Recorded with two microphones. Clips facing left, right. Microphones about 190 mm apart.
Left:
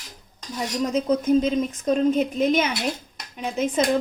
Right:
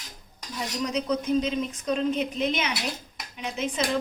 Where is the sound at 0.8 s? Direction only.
50° left (ahead or behind).